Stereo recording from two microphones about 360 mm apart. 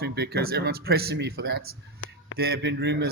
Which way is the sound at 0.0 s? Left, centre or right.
Right.